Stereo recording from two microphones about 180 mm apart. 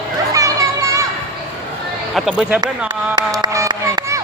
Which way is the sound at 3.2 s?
20° right (ahead or behind).